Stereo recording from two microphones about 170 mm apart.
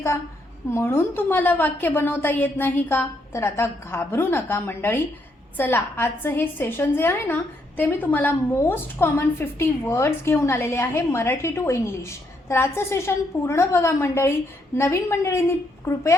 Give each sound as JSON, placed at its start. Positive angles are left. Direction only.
{"t": 0.7, "sound": "a woman's voice", "side_deg": 15}